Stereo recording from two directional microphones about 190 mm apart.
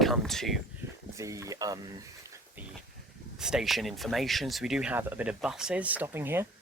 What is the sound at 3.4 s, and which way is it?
Speech, centre (ahead or behind).